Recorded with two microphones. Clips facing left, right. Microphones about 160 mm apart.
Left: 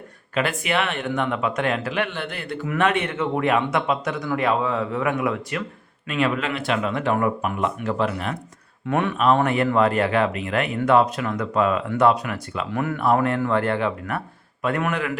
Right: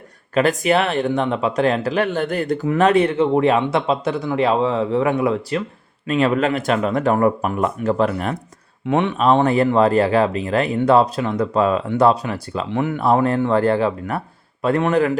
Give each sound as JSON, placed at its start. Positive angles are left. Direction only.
{"t": 0.3, "sound": "speech", "side_deg": -40}
{"t": 8.9, "sound": "speech", "side_deg": -20}